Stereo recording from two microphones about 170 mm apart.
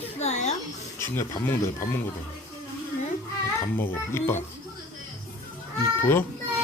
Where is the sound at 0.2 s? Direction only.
40° left (ahead or behind).